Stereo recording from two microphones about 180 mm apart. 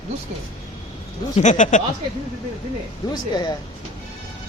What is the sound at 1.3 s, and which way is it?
Speech, 40° left (ahead or behind).